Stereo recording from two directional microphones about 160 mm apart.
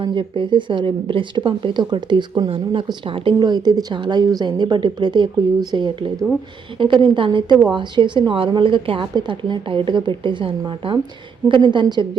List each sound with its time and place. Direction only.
0.0 s a woman's voice: 30° right (ahead or behind)